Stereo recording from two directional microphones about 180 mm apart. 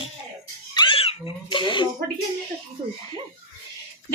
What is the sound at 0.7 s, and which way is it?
Screaming, 25° left (ahead or behind).